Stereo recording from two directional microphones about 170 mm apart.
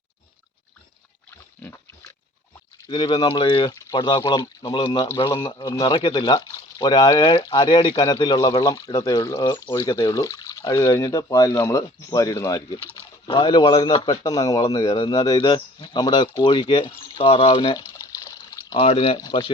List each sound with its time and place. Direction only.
2.9 s a man's voice: 25° left (ahead or behind)
17.9 s water: 20° left (ahead or behind)